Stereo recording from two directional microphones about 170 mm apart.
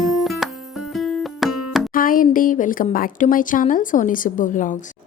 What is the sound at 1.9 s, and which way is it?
Speech, 55° left (ahead or behind).